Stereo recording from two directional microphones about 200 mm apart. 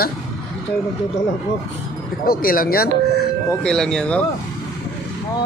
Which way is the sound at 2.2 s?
45° left (ahead or behind).